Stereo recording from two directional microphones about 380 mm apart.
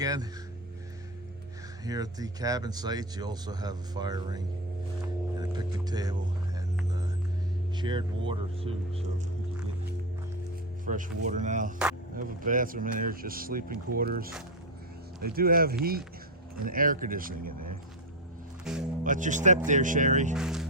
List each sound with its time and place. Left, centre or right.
0.0 s speech: centre
1.8 s speech: centre
7.8 s speech: centre
10.8 s speech: centre
18.6 s speech: centre
19.0 s speech: centre
20.3 s speech: centre